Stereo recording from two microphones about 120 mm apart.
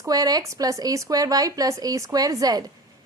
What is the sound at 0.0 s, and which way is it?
A woman's voice, 30° right (ahead or behind).